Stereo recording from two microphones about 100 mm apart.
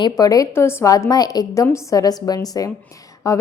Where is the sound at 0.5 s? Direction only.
25° left (ahead or behind).